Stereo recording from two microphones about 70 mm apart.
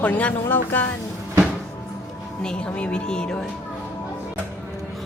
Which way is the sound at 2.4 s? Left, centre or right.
Centre.